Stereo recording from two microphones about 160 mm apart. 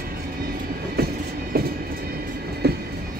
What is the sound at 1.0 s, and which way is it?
Train, 80° right.